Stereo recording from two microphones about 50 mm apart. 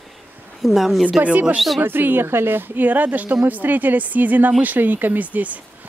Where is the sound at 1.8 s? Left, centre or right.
Right.